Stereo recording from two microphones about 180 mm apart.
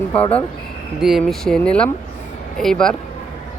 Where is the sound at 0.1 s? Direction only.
30° left (ahead or behind).